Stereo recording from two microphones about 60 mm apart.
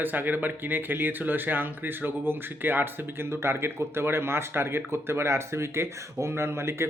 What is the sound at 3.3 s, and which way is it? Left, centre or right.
Speech, right.